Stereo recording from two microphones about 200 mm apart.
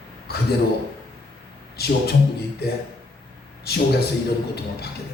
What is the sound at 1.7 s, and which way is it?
Speech, 55° left (ahead or behind).